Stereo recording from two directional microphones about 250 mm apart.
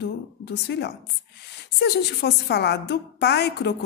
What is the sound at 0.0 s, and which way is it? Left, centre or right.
A woman's voice, left.